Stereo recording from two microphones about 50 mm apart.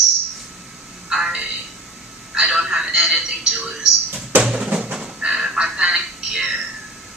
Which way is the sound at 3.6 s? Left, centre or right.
Right.